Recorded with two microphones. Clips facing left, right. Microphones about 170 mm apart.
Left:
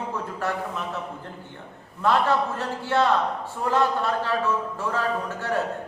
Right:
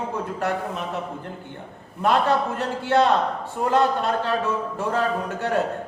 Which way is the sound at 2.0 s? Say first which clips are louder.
Right 1 dB; 20° right (ahead or behind).